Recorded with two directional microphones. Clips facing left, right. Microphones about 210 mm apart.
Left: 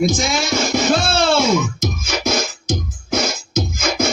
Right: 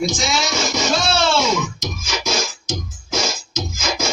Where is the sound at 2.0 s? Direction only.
60° left (ahead or behind).